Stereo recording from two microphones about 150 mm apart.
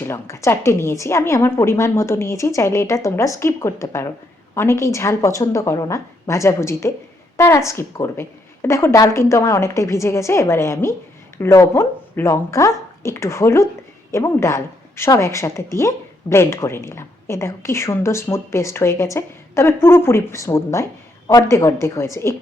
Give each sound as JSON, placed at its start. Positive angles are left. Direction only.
{"t": 0.0, "sound": "speech", "side_deg": 20}